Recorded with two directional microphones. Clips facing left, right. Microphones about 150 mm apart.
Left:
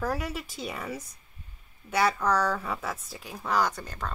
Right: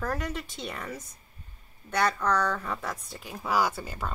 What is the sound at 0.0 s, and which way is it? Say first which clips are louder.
Speech: left 1 dB; 10° left (ahead or behind).